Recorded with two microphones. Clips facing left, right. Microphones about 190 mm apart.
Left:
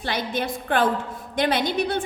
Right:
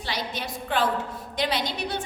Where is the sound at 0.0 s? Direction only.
55° left (ahead or behind).